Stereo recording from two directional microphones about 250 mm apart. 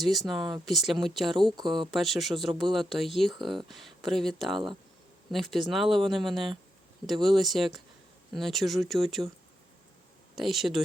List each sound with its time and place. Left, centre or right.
0.0 s speech: centre
1.5 s speech: centre
1.9 s speech: centre
10.3 s speech: centre